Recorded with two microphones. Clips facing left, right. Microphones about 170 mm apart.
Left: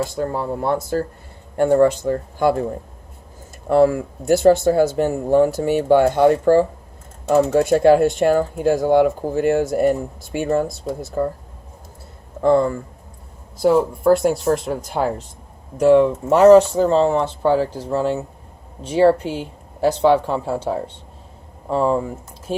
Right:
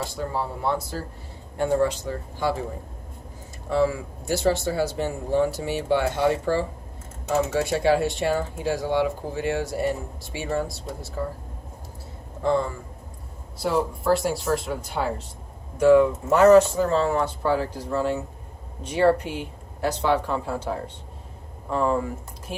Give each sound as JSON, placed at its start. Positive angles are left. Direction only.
{"t": 0.2, "sound": "speech", "side_deg": 50}
{"t": 3.7, "sound": "speech", "side_deg": 50}
{"t": 12.4, "sound": "speech", "side_deg": 50}
{"t": 15.8, "sound": "speech", "side_deg": 30}